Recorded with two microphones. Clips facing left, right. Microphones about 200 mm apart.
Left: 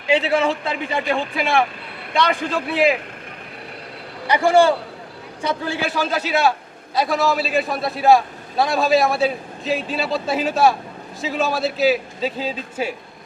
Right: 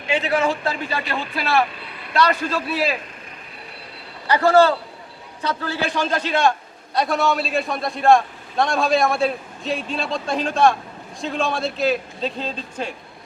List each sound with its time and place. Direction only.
0.2 s a man's voice: 25° left (ahead or behind)
4.3 s a man's voice: 15° left (ahead or behind)